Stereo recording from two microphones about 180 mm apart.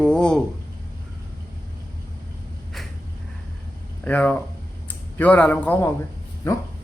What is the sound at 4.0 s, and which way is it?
A man's voice, 10° left (ahead or behind).